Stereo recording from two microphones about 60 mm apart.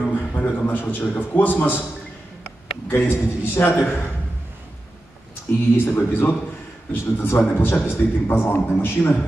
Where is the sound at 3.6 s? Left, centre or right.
Left.